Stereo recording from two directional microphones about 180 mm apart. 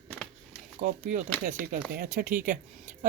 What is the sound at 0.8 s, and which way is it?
Speech, 45° right (ahead or behind).